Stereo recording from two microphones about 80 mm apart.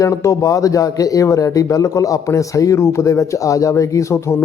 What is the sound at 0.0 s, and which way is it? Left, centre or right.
A man's voice, left.